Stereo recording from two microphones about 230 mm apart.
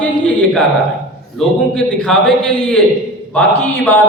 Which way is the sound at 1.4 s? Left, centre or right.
Centre.